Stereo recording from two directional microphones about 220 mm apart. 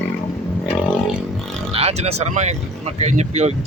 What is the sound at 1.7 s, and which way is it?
Speech, 25° right (ahead or behind).